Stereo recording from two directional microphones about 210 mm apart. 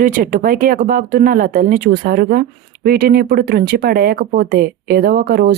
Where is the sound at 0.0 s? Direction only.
40° right (ahead or behind).